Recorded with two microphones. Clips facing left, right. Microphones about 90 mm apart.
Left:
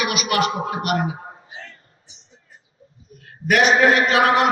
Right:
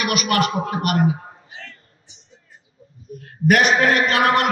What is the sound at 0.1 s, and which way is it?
Speech, 45° right (ahead or behind).